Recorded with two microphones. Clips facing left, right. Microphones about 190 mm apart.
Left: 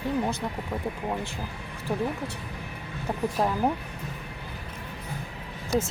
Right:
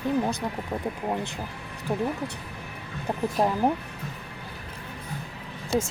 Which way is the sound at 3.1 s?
15° right (ahead or behind).